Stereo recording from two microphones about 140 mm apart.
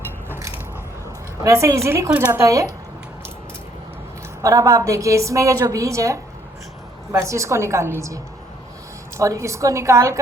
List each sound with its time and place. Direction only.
0.3 s biting: 20° right (ahead or behind)
1.4 s a woman's voice: 20° right (ahead or behind)
4.4 s a woman's voice: 20° right (ahead or behind)